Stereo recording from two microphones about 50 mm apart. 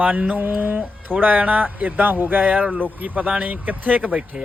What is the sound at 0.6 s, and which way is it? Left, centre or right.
Speech, right.